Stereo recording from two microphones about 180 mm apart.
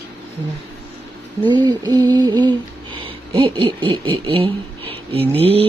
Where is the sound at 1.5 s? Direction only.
25° right (ahead or behind).